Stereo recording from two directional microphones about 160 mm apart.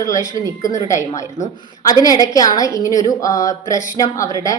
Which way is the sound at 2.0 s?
20° left (ahead or behind).